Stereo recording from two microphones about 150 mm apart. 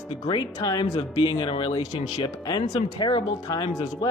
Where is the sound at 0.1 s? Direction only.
30° left (ahead or behind).